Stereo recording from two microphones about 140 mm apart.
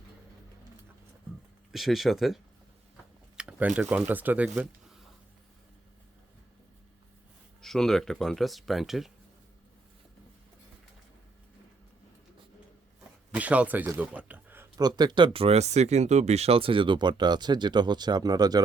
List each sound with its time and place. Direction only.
1.7 s speech: centre (ahead or behind)
4.4 s a sound: centre (ahead or behind)
7.6 s speech: 5° left (ahead or behind)
13.3 s speech: 10° right (ahead or behind)
14.8 s speech: 30° right (ahead or behind)